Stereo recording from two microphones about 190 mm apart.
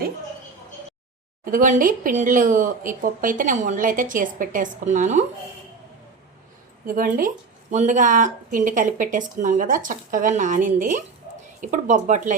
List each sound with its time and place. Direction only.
1.5 s speech: 45° right (ahead or behind)
6.8 s speech: 45° right (ahead or behind)